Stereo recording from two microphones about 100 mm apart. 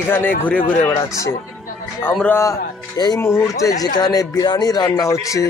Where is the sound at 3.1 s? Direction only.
25° left (ahead or behind).